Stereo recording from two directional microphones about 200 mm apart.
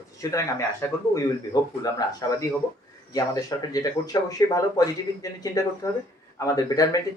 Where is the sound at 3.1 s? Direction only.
20° left (ahead or behind).